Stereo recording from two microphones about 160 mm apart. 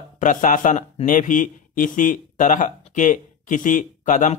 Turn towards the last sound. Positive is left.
turn(degrees=55)  # may be behind; listen again after turning